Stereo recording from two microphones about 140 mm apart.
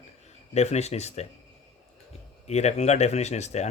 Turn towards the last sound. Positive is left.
turn(degrees=55)  # may be behind; listen again after turning